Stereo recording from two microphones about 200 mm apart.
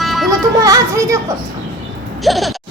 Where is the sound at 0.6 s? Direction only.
15° right (ahead or behind).